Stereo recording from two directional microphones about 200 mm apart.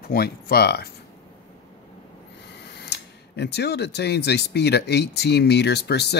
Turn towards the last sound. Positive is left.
turn(degrees=55)  # may be behind; listen again after turning